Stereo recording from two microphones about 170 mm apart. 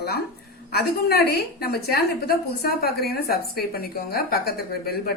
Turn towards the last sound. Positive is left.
turn(degrees=65)  # may be behind; listen again after turning